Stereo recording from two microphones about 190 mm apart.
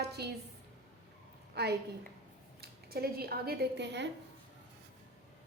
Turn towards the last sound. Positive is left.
turn(degrees=-65)  # may be behind; listen again after turning